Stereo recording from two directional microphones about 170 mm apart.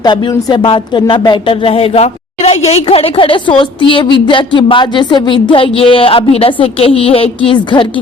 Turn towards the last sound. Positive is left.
turn(degrees=30)  # may be behind; listen again after turning